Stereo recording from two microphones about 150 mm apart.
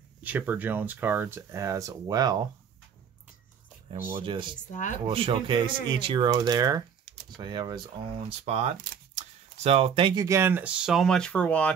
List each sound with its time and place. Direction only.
0.2 s speech: 10° right (ahead or behind)
3.9 s speech: 35° right (ahead or behind)
4.6 s speech: 55° left (ahead or behind)
5.0 s speech: 40° right (ahead or behind)
8.5 s speech: 45° right (ahead or behind)
10.2 s speech: 15° right (ahead or behind); by 11.7 s 10° left (ahead or behind)